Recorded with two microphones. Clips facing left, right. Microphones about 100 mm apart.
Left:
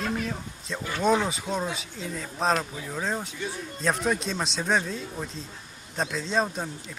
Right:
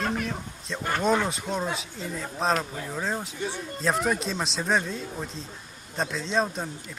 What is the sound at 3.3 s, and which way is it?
Speech, 65° right (ahead or behind).